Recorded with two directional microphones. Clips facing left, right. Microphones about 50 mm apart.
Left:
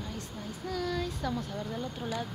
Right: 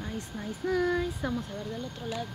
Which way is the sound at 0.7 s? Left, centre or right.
Right.